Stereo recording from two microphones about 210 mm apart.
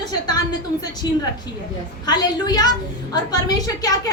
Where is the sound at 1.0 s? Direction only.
20° left (ahead or behind).